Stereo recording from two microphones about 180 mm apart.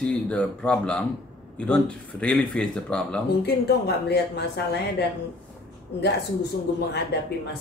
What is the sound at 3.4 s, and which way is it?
Speech, 65° left (ahead or behind).